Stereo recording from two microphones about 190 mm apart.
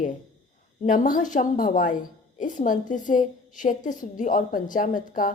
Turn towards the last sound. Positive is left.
turn(degrees=45)  # may be behind; listen again after turning